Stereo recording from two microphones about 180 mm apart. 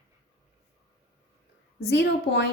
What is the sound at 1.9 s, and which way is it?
Speech, 70° left (ahead or behind).